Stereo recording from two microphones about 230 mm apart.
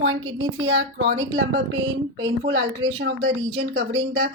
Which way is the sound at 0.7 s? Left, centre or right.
Right.